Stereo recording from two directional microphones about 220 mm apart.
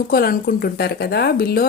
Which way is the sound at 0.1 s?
40° left (ahead or behind).